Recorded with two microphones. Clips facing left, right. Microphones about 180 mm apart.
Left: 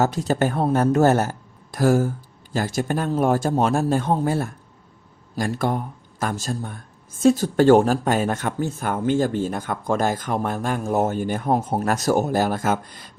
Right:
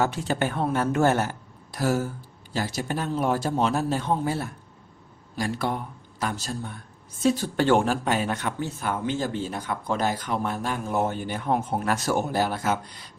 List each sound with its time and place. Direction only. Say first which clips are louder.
0.0 s speech: left 4 dB; 40° left (ahead or behind)